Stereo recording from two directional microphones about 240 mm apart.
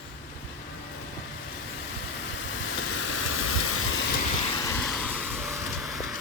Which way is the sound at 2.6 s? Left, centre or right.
Left.